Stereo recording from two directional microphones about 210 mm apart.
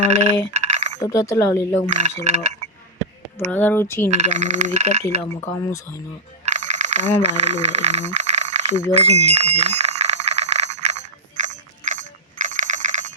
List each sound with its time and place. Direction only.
0.0 s coin: 35° right (ahead or behind)
0.9 s speech: 15° left (ahead or behind)
1.9 s frog: 35° right (ahead or behind)
3.3 s speech: 10° left (ahead or behind)
4.1 s frog: 35° right (ahead or behind)
5.3 s speech: 15° left (ahead or behind)
6.4 s coin: 30° right (ahead or behind)
8.9 s a sound: 30° right (ahead or behind)